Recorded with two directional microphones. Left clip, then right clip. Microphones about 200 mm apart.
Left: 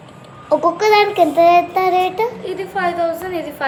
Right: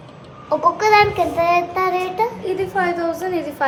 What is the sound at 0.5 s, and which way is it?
Child singing, 45° left (ahead or behind).